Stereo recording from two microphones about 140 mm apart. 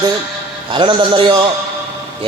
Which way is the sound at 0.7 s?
35° right (ahead or behind).